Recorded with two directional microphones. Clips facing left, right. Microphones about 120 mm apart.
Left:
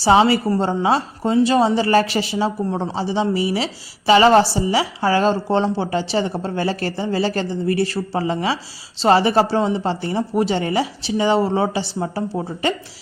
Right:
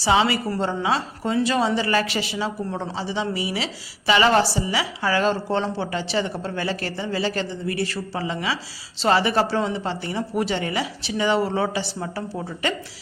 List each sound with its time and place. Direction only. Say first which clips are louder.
0.0 s a woman's voice: left 6 dB; 35° left (ahead or behind)